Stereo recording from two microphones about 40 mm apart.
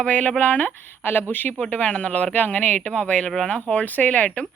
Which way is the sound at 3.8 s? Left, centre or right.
Left.